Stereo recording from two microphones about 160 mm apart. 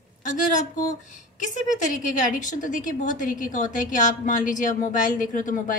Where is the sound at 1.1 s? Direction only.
50° left (ahead or behind).